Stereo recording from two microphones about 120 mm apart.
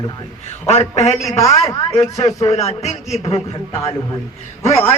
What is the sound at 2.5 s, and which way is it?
A man's voice, 65° left (ahead or behind).